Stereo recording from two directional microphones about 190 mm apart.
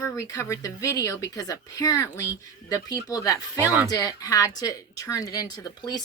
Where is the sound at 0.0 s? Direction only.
15° left (ahead or behind).